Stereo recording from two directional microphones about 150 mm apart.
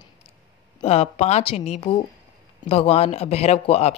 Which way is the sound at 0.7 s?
45° left (ahead or behind).